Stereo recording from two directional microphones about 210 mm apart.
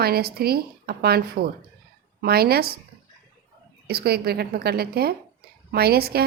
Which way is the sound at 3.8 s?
50° right (ahead or behind).